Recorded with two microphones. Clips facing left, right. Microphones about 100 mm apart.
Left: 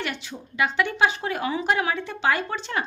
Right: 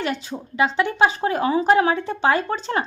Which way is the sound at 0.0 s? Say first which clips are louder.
Right 6 dB; 35° right (ahead or behind).